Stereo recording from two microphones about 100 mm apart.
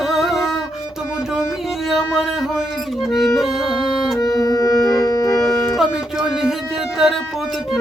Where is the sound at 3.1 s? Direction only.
5° left (ahead or behind).